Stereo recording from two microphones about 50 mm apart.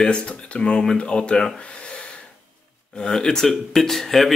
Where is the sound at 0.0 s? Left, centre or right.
Left.